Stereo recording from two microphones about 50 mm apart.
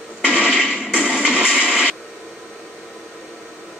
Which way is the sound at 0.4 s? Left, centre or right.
Centre.